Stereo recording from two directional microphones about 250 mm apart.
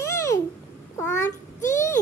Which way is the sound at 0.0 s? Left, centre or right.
Centre.